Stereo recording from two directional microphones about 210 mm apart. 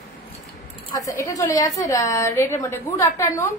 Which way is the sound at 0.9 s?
15° left (ahead or behind).